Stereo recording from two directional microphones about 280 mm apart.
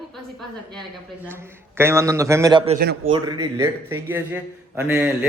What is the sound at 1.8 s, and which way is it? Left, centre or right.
A man's voice, centre.